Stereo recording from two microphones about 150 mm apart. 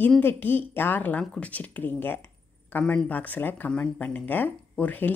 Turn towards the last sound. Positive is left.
turn(degrees=10)  # may be behind; listen again after turning